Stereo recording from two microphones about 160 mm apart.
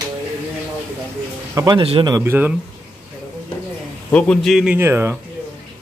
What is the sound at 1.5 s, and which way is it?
Speech, 20° right (ahead or behind).